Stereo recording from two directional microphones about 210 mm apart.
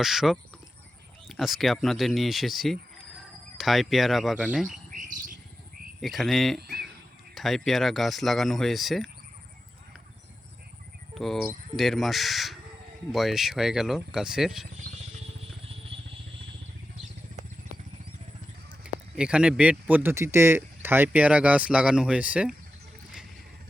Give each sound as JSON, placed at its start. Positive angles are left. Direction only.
{"t": 0.0, "sound": "speech", "side_deg": 0}
{"t": 4.9, "sound": "bird", "side_deg": -40}
{"t": 6.0, "sound": "speech", "side_deg": 0}
{"t": 11.1, "sound": "speech", "side_deg": 0}
{"t": 18.8, "sound": "speech", "side_deg": -5}